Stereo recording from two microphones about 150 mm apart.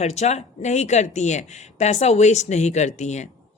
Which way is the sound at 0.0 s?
45° left (ahead or behind).